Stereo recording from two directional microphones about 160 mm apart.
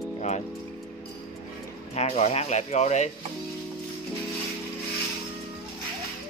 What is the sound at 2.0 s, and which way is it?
Speech, 40° left (ahead or behind).